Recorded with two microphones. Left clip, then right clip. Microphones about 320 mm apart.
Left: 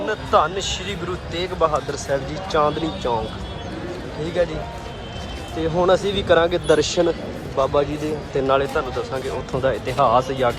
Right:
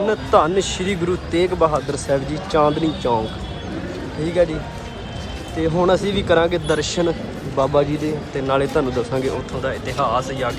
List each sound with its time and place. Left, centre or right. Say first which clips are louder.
0.0 s speech: right 2 dB; centre
4.2 s speech: right 4 dB; centre
5.5 s speech: right 1 dB; centre